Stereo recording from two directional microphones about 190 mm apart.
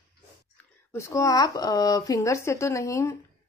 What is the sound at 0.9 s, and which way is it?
Speech, 15° left (ahead or behind).